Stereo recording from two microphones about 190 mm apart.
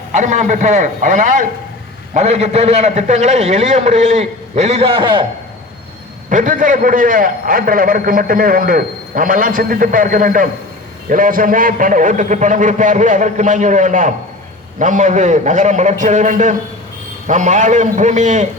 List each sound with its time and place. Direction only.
0.1 s a man's voice: 40° right (ahead or behind)
6.3 s a man's voice: 45° right (ahead or behind)